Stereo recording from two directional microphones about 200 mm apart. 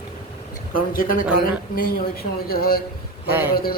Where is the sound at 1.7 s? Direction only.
50° left (ahead or behind).